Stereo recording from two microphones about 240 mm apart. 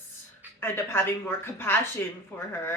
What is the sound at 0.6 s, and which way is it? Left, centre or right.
A woman's voice, centre.